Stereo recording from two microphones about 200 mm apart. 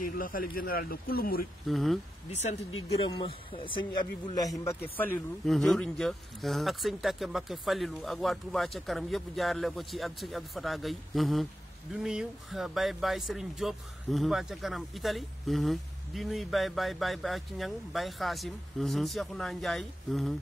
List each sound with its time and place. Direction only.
0.0 s speech: 45° left (ahead or behind)
1.7 s speech: centre (ahead or behind)
3.1 s a man's voice: 25° left (ahead or behind)
4.9 s speech: 10° left (ahead or behind)